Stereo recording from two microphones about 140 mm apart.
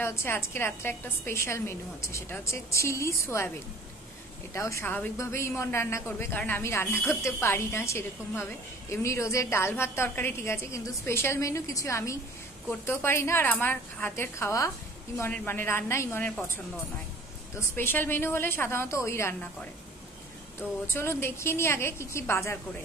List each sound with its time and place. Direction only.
0.0 s a woman's voice: 20° left (ahead or behind)
4.6 s a woman's voice: 20° left (ahead or behind)
17.6 s a woman's voice: 15° left (ahead or behind)
20.9 s a woman's voice: 15° left (ahead or behind)